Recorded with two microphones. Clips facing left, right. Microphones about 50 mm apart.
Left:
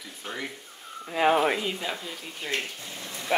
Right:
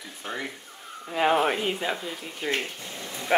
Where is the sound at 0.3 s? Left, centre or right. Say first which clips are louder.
Right 2 dB; centre.